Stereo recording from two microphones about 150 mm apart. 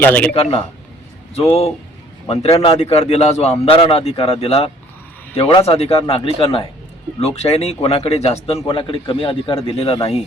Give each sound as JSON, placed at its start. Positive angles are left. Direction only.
{"t": 0.0, "sound": "a man's voice", "side_deg": 10}
{"t": 1.4, "sound": "a man's voice", "side_deg": 45}